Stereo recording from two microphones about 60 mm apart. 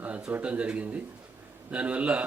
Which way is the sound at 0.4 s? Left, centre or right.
Right.